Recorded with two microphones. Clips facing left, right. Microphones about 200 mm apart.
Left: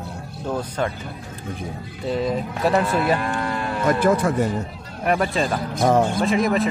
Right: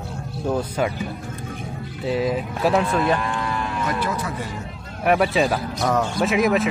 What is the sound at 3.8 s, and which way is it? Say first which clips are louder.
Speech: left 11 dB; 50° left (ahead or behind).